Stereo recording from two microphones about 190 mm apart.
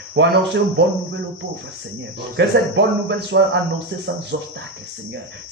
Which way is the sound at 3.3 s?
75° right (ahead or behind).